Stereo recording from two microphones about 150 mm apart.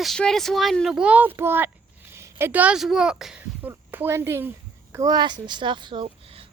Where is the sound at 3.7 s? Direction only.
15° right (ahead or behind).